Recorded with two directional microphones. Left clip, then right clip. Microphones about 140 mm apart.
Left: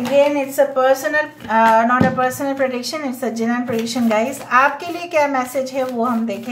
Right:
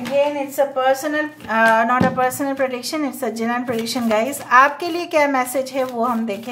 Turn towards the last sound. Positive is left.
turn(degrees=-35)  # may be behind; listen again after turning